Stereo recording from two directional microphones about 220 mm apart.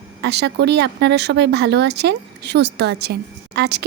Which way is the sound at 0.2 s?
50° right (ahead or behind).